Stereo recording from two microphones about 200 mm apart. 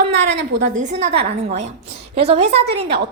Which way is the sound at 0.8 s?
35° right (ahead or behind).